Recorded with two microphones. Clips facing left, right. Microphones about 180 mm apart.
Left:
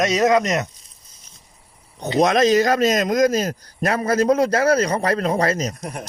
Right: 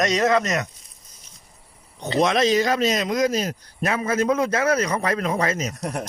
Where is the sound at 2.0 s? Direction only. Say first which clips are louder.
Left 3 dB; 40° left (ahead or behind).